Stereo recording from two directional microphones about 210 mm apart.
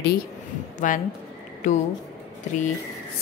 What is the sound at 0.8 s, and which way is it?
Speech, 40° left (ahead or behind).